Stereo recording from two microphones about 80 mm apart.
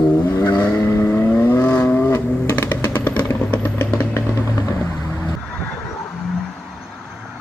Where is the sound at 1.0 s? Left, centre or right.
Left.